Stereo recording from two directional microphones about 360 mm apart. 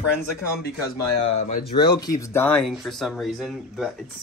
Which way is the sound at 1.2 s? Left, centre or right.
Left.